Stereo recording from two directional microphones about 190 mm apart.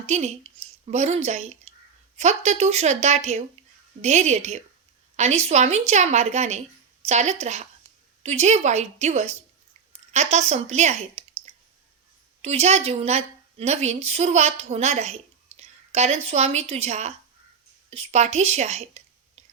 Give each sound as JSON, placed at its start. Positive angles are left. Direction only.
{"t": 0.1, "sound": "a woman's voice", "side_deg": -35}
{"t": 12.4, "sound": "a woman's voice", "side_deg": -35}